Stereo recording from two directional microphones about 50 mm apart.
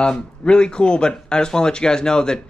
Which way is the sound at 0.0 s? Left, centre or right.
Centre.